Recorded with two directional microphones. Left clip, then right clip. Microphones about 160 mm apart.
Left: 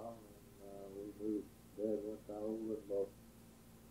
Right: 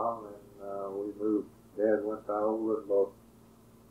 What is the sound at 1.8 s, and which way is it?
Speech, 15° right (ahead or behind).